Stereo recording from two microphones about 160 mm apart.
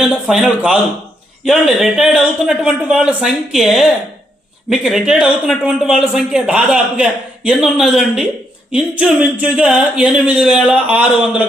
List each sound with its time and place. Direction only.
0.0 s speech: 5° right (ahead or behind)